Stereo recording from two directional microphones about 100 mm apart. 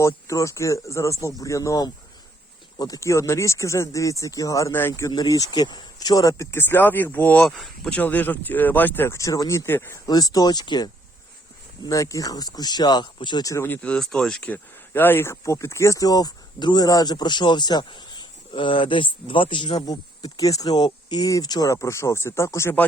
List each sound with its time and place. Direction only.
0.0 s speech: 30° left (ahead or behind)
4.7 s speech: 25° left (ahead or behind)
5.1 s speech: 35° left (ahead or behind); by 7.4 s 15° left (ahead or behind)
7.4 s speech: centre (ahead or behind)
7.9 s speech: 15° left (ahead or behind)
9.1 s speech: 35° left (ahead or behind)
10.1 s speech: 40° left (ahead or behind)
11.8 s speech: 35° left (ahead or behind); by 13.4 s 50° left (ahead or behind)
13.4 s speech: 30° left (ahead or behind)
13.7 s speech: 10° left (ahead or behind); by 19.8 s 55° left (ahead or behind)
19.8 s speech: 40° left (ahead or behind); by 22.9 s 20° left (ahead or behind)